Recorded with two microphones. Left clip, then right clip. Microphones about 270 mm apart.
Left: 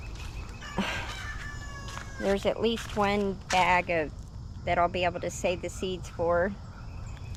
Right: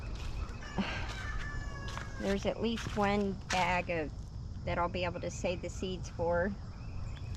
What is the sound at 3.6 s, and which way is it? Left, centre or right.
Speech, centre.